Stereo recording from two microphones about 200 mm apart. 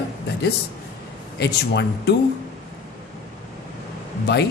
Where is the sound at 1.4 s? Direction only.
55° left (ahead or behind).